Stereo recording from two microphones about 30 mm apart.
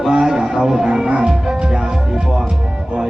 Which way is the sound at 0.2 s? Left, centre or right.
Centre.